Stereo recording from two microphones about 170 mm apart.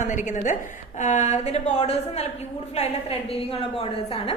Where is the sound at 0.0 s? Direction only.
45° left (ahead or behind).